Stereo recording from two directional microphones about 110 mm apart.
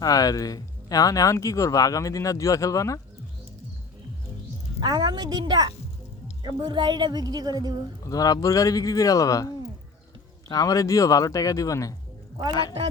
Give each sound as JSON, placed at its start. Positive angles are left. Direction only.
{"t": 0.0, "sound": "speech", "side_deg": 35}
{"t": 4.8, "sound": "speech", "side_deg": -40}
{"t": 8.0, "sound": "speech", "side_deg": 35}